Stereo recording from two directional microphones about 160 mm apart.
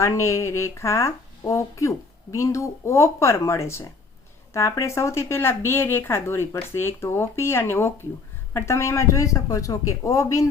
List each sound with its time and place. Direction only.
0.0 s speech: 20° left (ahead or behind)